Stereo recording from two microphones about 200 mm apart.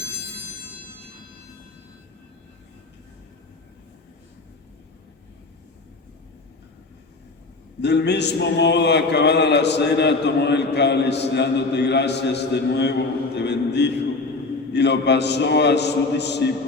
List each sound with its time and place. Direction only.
7.8 s a man's voice: 60° left (ahead or behind)